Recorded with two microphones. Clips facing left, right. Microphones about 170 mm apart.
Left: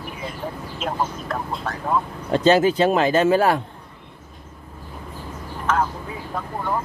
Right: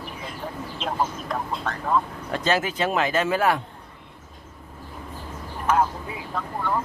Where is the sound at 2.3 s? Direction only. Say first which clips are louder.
Left 8 dB; 30° left (ahead or behind).